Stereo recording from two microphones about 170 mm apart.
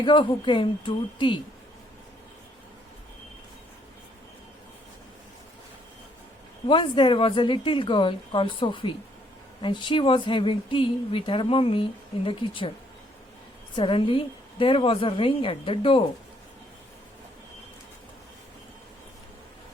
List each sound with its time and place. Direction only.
0.0 s a woman's voice: 30° left (ahead or behind)
6.7 s a woman's voice: 30° left (ahead or behind)
13.7 s a woman's voice: 30° left (ahead or behind)